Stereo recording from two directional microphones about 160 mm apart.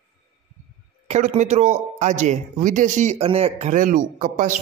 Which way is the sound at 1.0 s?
45° right (ahead or behind).